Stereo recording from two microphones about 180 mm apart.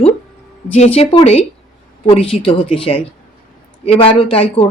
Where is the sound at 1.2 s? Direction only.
35° left (ahead or behind).